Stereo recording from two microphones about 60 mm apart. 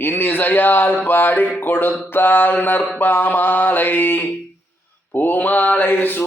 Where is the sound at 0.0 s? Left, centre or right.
Left.